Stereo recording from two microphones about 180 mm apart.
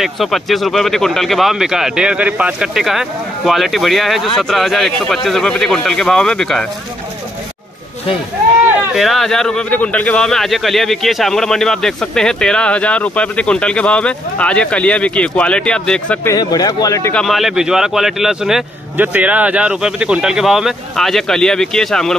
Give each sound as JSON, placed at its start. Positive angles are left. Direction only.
{"t": 0.0, "sound": "speech", "side_deg": 0}
{"t": 8.9, "sound": "speech", "side_deg": 0}
{"t": 16.3, "sound": "speech", "side_deg": 20}
{"t": 17.1, "sound": "speech", "side_deg": 0}